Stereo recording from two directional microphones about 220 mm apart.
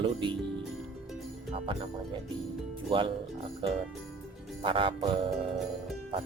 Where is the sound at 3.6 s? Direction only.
20° right (ahead or behind).